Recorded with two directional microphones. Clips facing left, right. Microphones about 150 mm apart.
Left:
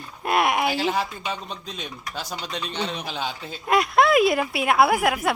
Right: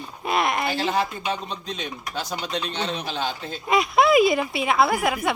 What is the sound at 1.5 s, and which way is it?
Speech, 5° left (ahead or behind).